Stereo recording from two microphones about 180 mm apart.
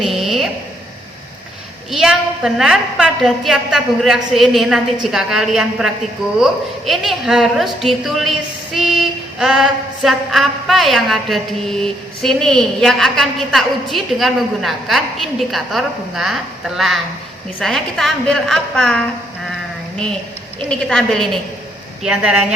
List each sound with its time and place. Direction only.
0.0 s a sound: centre (ahead or behind)
1.9 s a woman's voice: centre (ahead or behind)
20.7 s a woman's voice: 5° left (ahead or behind)